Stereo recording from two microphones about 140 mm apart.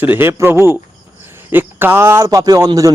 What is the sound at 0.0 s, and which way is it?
A man's voice, 15° right (ahead or behind).